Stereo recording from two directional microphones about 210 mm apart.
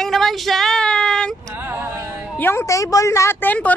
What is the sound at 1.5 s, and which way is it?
Music, 10° right (ahead or behind).